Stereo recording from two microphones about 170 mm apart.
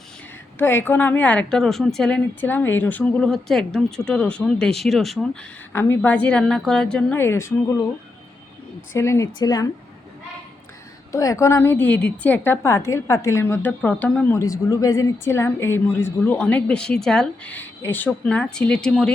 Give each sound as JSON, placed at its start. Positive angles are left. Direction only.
{"t": 0.6, "sound": "a woman's voice", "side_deg": 15}
{"t": 9.0, "sound": "a woman's voice", "side_deg": 15}
{"t": 11.1, "sound": "a woman's voice", "side_deg": 20}